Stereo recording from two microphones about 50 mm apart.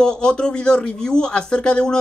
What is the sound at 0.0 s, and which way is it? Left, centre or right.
Speech, centre.